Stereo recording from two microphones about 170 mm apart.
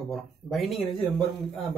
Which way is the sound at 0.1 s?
Centre (ahead or behind).